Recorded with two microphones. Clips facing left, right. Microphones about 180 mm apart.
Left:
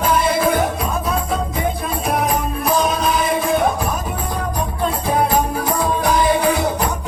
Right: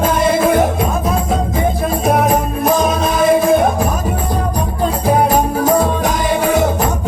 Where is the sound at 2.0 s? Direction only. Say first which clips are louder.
Right 5 dB; 45° right (ahead or behind).